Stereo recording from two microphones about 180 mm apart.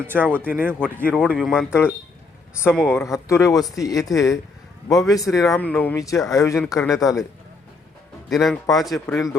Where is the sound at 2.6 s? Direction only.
10° left (ahead or behind).